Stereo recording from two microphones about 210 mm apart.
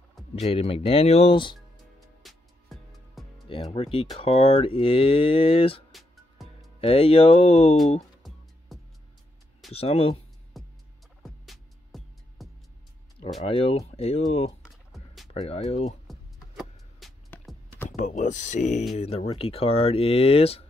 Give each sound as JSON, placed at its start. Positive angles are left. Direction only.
{"t": 0.4, "sound": "speech", "side_deg": 30}
{"t": 2.2, "sound": "music", "side_deg": 0}
{"t": 3.7, "sound": "speech", "side_deg": 25}
{"t": 5.9, "sound": "music", "side_deg": 0}
{"t": 6.8, "sound": "speech", "side_deg": 25}
{"t": 8.7, "sound": "music", "side_deg": 0}
{"t": 9.7, "sound": "speech", "side_deg": 30}
{"t": 10.6, "sound": "music", "side_deg": 0}
{"t": 13.4, "sound": "speech", "side_deg": 30}
{"t": 16.1, "sound": "music", "side_deg": 0}
{"t": 17.8, "sound": "speech", "side_deg": 35}